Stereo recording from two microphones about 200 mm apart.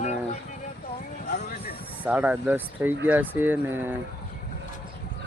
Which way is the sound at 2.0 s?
5° right (ahead or behind).